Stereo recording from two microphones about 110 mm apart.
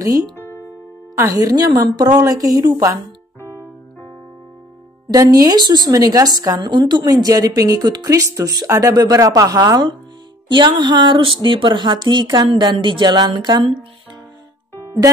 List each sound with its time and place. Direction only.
0.0 s a woman's voice: 35° right (ahead or behind)
3.3 s keyboard: 20° left (ahead or behind)
5.1 s a woman's voice: 35° right (ahead or behind)
12.7 s speech: 50° right (ahead or behind)